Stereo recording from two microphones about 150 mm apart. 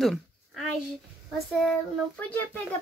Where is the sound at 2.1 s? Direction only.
10° left (ahead or behind).